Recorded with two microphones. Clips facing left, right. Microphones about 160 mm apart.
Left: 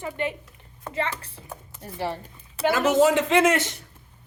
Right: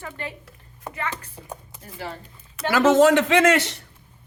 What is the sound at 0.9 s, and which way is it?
Speech, 10° right (ahead or behind).